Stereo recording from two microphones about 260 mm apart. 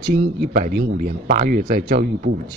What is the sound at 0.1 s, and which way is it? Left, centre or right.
Speech, right.